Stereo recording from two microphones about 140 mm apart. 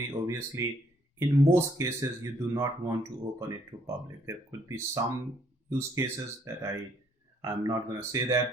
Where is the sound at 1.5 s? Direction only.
20° right (ahead or behind).